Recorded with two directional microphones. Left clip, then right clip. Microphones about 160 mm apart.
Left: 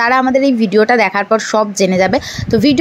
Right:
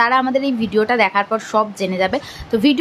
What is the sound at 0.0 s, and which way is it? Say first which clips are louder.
A woman's voice: left 4 dB; 30° left (ahead or behind).